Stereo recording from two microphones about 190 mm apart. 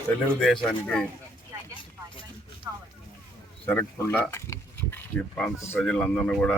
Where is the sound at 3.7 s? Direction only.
10° left (ahead or behind).